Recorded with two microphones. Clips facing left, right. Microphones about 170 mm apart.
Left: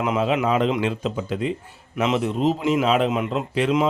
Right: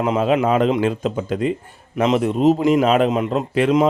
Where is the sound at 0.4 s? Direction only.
45° right (ahead or behind).